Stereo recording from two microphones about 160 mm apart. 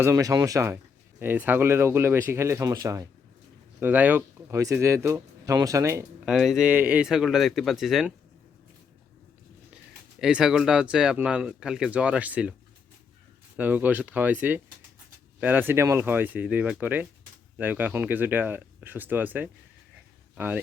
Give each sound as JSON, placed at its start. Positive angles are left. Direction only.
{"t": 0.0, "sound": "speech", "side_deg": -20}
{"t": 3.8, "sound": "speech", "side_deg": -10}
{"t": 6.2, "sound": "speech", "side_deg": 0}
{"t": 9.7, "sound": "speech", "side_deg": -5}
{"t": 13.6, "sound": "speech", "side_deg": -10}